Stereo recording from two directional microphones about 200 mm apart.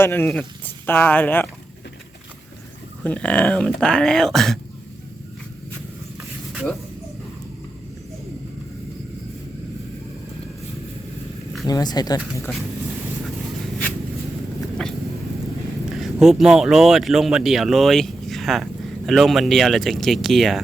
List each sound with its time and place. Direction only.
0.0 s speech: 10° left (ahead or behind)
3.0 s speech: 5° left (ahead or behind)
6.5 s a sound: 5° right (ahead or behind)
11.7 s speech: 20° left (ahead or behind)
16.0 s speech: centre (ahead or behind)